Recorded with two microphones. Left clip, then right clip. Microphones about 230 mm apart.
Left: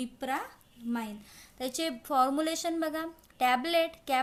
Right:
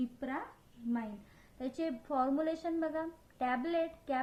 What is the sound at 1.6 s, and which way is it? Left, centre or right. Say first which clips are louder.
A woman's voice: left 4 dB; left.